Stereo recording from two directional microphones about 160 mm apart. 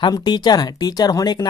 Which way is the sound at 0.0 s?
25° left (ahead or behind).